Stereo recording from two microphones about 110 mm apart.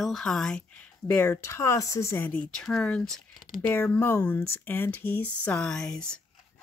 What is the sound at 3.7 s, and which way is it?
Speech, 20° left (ahead or behind).